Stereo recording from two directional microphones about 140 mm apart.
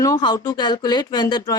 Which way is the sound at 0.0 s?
25° left (ahead or behind).